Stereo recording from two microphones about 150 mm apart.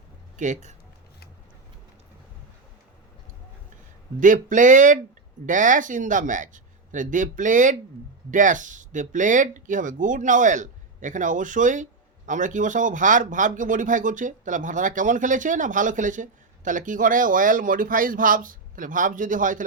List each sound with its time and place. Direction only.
0.3 s speech: 55° right (ahead or behind)
4.2 s speech: 60° right (ahead or behind)